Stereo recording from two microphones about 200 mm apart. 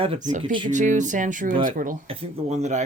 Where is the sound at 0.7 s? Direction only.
40° right (ahead or behind).